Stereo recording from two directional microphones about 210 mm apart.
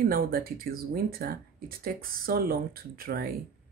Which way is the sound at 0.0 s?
45° right (ahead or behind).